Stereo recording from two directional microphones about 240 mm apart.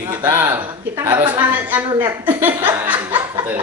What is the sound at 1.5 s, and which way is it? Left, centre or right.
Speech, centre.